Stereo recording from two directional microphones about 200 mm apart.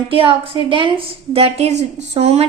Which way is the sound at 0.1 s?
25° right (ahead or behind).